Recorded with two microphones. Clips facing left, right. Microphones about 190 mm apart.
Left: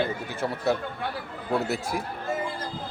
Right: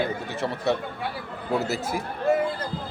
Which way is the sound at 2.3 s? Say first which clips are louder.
Right 9 dB; 65° right (ahead or behind).